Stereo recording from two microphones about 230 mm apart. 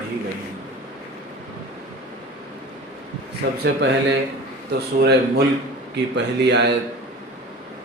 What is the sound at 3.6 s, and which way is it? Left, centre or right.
Speech, right.